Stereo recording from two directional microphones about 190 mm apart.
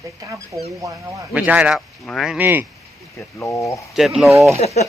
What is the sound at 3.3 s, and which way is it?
Speech, 15° left (ahead or behind).